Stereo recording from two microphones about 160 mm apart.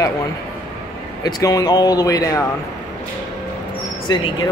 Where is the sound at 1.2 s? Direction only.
20° left (ahead or behind).